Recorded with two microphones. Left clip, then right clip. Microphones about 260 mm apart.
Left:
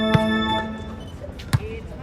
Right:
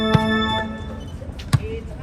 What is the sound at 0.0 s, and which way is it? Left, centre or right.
Music, left.